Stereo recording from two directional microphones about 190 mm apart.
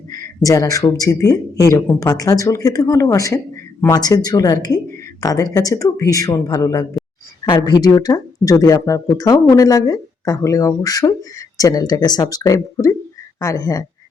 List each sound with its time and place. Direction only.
0.4 s speech: 20° left (ahead or behind)